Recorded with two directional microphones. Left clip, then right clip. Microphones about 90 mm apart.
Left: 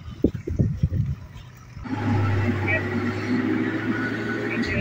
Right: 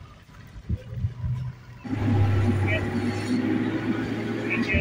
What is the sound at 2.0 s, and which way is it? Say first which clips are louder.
Vehicle: left 2 dB; 65° right (ahead or behind).